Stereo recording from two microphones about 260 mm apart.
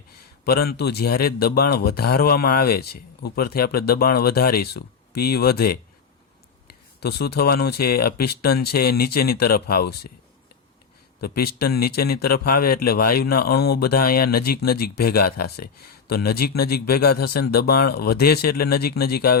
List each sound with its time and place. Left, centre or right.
0.4 s speech: left
7.0 s speech: left
11.2 s speech: left